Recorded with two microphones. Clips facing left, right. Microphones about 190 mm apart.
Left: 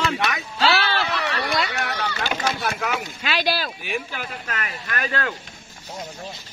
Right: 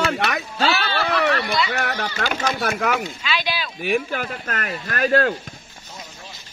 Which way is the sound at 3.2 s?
45° left (ahead or behind).